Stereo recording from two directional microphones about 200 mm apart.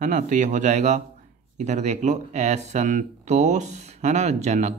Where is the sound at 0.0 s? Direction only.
40° right (ahead or behind).